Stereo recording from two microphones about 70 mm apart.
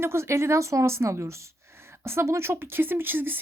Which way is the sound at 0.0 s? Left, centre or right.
Right.